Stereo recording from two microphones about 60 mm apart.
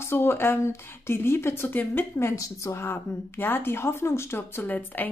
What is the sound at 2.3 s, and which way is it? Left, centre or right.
Speech, left.